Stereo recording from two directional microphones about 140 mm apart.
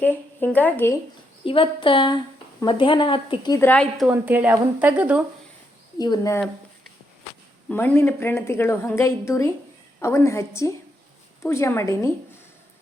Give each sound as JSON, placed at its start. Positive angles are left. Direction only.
{"t": 0.0, "sound": "speech", "side_deg": 10}
{"t": 1.5, "sound": "a woman's voice", "side_deg": 40}
{"t": 3.6, "sound": "speech", "side_deg": 10}
{"t": 4.1, "sound": "speech", "side_deg": -10}
{"t": 6.0, "sound": "a woman's voice", "side_deg": 25}
{"t": 7.7, "sound": "a woman's voice", "side_deg": 15}